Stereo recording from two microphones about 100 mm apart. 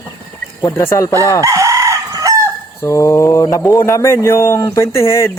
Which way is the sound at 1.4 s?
35° right (ahead or behind).